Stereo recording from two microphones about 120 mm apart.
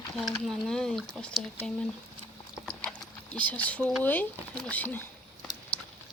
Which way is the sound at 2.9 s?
10° left (ahead or behind).